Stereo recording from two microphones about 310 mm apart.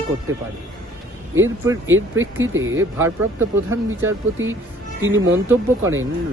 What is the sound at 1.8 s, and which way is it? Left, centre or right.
Speech, right.